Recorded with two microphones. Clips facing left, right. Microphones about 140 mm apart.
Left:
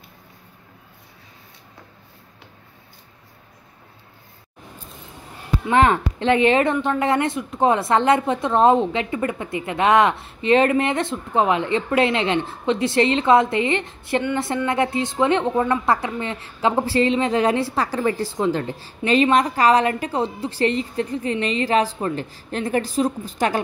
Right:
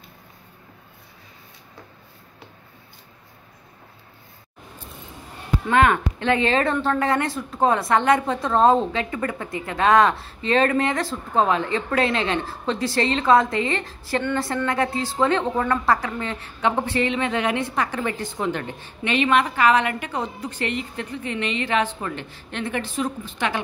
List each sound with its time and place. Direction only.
5.7 s a woman's voice: 25° left (ahead or behind)